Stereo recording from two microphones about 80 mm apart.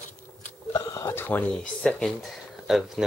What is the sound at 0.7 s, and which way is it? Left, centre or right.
Speech, left.